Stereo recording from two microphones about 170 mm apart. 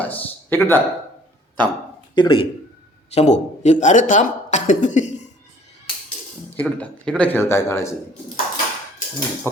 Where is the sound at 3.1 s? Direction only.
45° left (ahead or behind).